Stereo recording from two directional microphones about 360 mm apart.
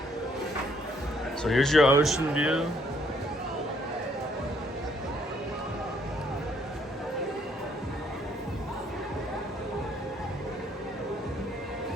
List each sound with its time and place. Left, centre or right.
1.5 s speech: centre